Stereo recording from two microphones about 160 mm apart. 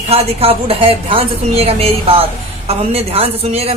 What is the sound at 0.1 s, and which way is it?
A woman's voice, 40° right (ahead or behind).